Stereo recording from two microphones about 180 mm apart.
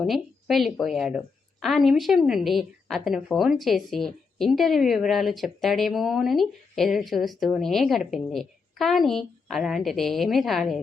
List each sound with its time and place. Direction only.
0.0 s a woman's voice: centre (ahead or behind)